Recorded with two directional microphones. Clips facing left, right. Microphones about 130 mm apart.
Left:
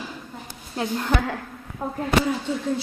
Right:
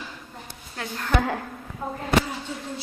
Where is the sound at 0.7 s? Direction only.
20° left (ahead or behind).